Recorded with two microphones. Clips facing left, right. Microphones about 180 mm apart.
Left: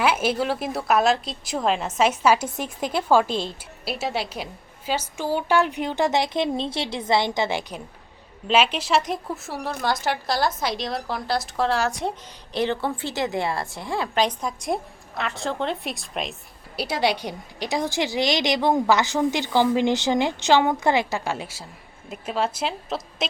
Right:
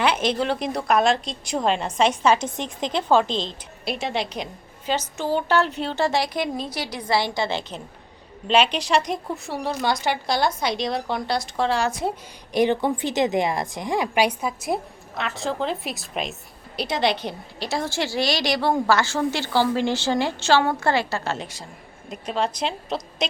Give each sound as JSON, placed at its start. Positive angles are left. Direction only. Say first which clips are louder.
{"t": 0.0, "sound": "a woman's voice", "louder": "even", "side_deg": 5}
{"t": 8.4, "sound": "a woman's voice", "louder": "right 1 dB", "side_deg": 5}
{"t": 12.5, "sound": "a woman's voice", "louder": "right 4 dB", "side_deg": -15}